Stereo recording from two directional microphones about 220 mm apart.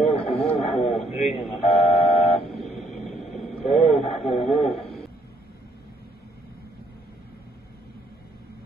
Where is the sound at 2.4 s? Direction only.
30° left (ahead or behind).